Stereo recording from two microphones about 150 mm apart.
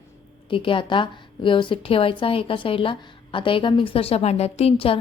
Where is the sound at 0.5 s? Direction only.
35° left (ahead or behind).